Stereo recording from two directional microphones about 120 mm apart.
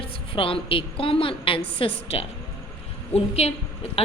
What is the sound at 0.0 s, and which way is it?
A woman's voice, 50° left (ahead or behind).